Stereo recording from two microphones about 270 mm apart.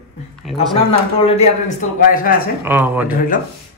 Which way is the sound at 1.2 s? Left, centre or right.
Left.